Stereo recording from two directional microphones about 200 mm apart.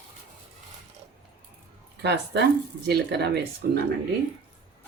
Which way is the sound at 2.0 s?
55° right (ahead or behind).